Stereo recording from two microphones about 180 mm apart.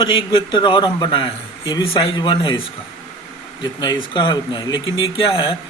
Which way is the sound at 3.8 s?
25° left (ahead or behind).